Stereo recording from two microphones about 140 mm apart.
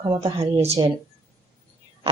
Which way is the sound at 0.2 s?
45° right (ahead or behind).